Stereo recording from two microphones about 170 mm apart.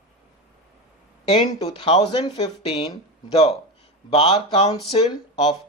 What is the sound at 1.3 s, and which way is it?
Speech, 25° left (ahead or behind).